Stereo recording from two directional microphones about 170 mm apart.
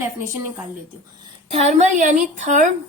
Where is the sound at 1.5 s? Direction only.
40° right (ahead or behind).